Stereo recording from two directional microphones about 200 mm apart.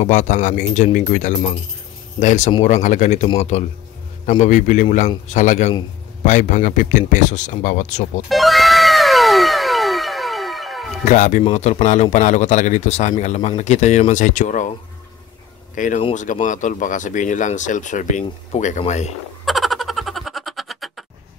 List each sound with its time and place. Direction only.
0.0 s speech: 35° left (ahead or behind)
8.3 s cat: centre (ahead or behind)
11.1 s speech: 40° left (ahead or behind)
15.7 s speech: 40° left (ahead or behind)
19.4 s a sound: centre (ahead or behind)